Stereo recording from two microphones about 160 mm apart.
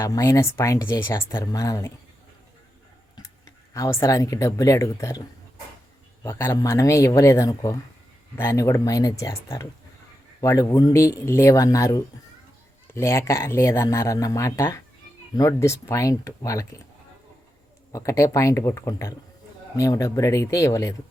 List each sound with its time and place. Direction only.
0.0 s speech: 20° left (ahead or behind)
3.2 s speech: 20° left (ahead or behind)
6.2 s speech: 15° left (ahead or behind)
17.9 s speech: 20° left (ahead or behind)